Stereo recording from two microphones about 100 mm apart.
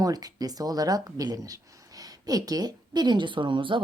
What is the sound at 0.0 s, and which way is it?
Speech, 40° right (ahead or behind).